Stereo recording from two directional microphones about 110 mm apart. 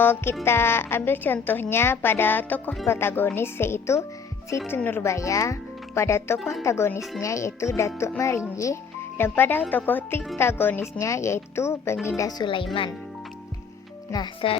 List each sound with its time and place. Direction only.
0.0 s speech: 20° left (ahead or behind)
14.4 s speech: 50° left (ahead or behind)